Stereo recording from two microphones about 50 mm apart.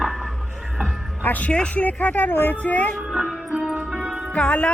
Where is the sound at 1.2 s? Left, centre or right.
Left.